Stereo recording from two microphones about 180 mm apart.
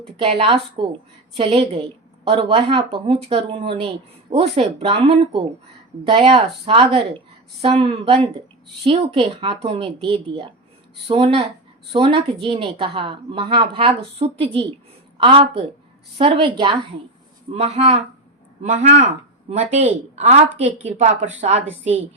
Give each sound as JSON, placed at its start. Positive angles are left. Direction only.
{"t": 0.2, "sound": "a woman's voice", "side_deg": -35}
{"t": 20.1, "sound": "a woman's voice", "side_deg": -35}